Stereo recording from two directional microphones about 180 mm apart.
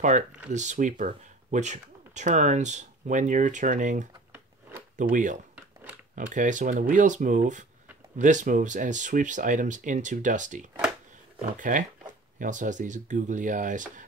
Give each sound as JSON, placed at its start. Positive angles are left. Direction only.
{"t": 0.5, "sound": "speech", "side_deg": -40}